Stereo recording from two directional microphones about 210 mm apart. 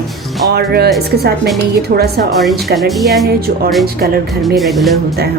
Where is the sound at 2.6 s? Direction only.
Centre (ahead or behind).